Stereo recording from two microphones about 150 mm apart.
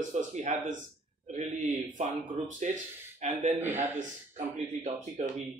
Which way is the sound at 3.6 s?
15° right (ahead or behind).